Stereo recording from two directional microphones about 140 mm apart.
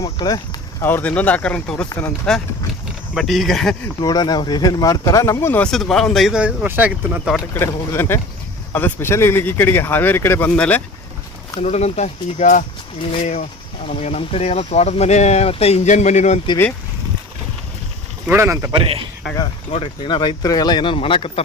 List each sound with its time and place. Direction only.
0.0 s speech: 25° left (ahead or behind)
0.9 s speech: 15° left (ahead or behind)
4.0 s speech: 30° left (ahead or behind)
5.7 s speech: centre (ahead or behind)
7.5 s speech: 15° left (ahead or behind)
11.6 s speech: 50° left (ahead or behind)
18.3 s speech: 20° right (ahead or behind)
18.7 s speech: 40° right (ahead or behind)
19.7 s speech: 40° left (ahead or behind)